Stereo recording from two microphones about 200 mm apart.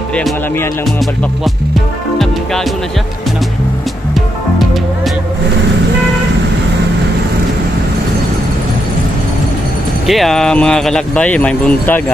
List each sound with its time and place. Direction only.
0.1 s speech: 5° left (ahead or behind)
10.0 s speech: centre (ahead or behind)